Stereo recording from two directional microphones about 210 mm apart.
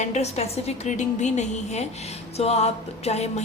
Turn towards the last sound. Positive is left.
turn(degrees=30)  # may be behind; listen again after turning